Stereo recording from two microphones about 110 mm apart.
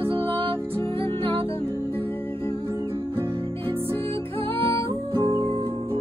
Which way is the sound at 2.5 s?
35° left (ahead or behind).